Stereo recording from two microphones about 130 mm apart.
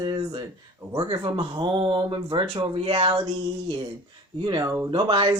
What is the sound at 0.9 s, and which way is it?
Speech, 35° right (ahead or behind).